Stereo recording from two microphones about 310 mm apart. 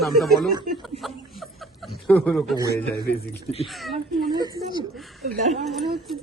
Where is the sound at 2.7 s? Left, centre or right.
Left.